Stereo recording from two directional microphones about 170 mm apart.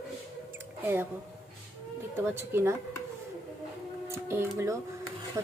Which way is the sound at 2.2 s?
15° right (ahead or behind).